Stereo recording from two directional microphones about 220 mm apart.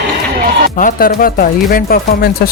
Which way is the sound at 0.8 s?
40° left (ahead or behind).